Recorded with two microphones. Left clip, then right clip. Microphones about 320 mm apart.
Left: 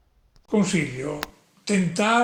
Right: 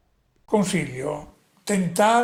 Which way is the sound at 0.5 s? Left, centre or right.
Right.